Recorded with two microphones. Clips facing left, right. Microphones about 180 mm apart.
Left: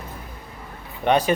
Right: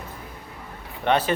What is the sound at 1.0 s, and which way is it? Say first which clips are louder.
Speech: left 2 dB; 15° left (ahead or behind).